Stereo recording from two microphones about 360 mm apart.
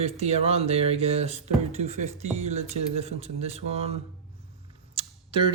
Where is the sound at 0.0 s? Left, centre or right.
Centre.